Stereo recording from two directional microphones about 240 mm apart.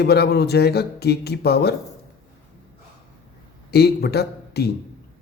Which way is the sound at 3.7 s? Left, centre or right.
Left.